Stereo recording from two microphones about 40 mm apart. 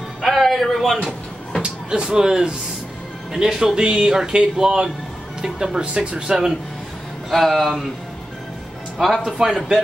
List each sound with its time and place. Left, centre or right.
0.2 s a sound: centre
1.6 s speech: right
7.2 s speech: centre
9.2 s speech: centre